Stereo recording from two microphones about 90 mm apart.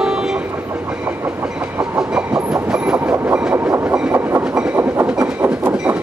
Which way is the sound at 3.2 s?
15° right (ahead or behind).